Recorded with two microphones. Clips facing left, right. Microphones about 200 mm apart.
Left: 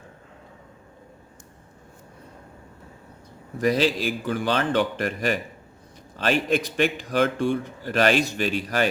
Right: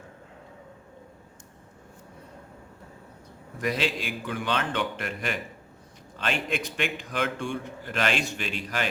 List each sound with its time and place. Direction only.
3.6 s a man's voice: 35° left (ahead or behind)